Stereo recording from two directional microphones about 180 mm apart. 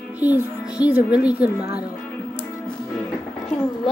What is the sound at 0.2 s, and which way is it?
A woman's voice, 10° right (ahead or behind).